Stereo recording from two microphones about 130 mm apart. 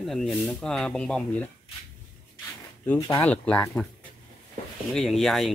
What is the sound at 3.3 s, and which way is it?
Speech, 10° left (ahead or behind).